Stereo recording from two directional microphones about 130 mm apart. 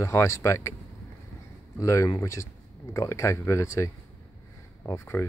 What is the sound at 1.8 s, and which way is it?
Speech, 25° left (ahead or behind).